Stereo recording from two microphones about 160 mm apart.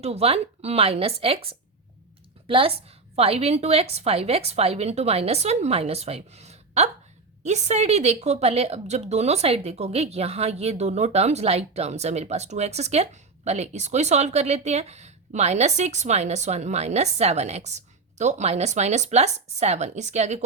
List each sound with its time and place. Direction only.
0.0 s a woman's voice: 40° right (ahead or behind)